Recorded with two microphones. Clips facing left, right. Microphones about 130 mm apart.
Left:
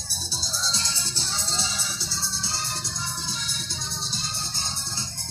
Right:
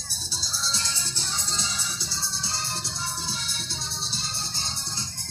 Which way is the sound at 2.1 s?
25° right (ahead or behind).